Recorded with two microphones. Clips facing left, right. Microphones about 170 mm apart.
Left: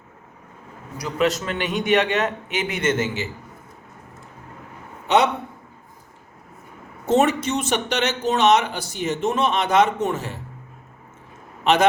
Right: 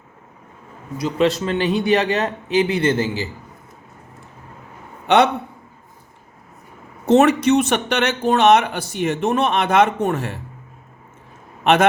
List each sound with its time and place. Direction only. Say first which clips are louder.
0.9 s a man's voice: right 3 dB; 25° right (ahead or behind)
5.0 s a man's voice: right 3 dB; 65° right (ahead or behind)
7.1 s speech: right 5 dB; 70° right (ahead or behind)
11.6 s a man's voice: right 2 dB; 60° right (ahead or behind)